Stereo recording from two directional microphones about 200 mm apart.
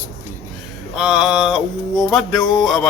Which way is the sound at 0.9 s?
5° right (ahead or behind).